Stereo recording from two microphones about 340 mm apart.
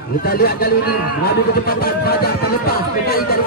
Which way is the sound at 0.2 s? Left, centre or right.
Left.